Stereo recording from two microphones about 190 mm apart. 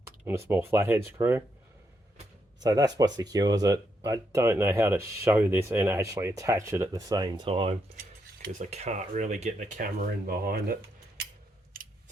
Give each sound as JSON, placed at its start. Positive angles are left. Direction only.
{"t": 0.0, "sound": "speech", "side_deg": -15}
{"t": 2.6, "sound": "speech", "side_deg": -20}
{"t": 7.9, "sound": "mechanisms", "side_deg": -45}